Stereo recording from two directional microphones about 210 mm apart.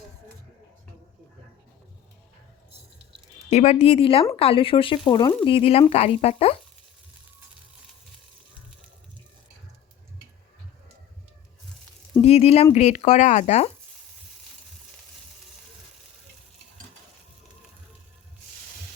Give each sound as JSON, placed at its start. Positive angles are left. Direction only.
{"t": 3.5, "sound": "speech", "side_deg": 35}
{"t": 12.2, "sound": "speech", "side_deg": 30}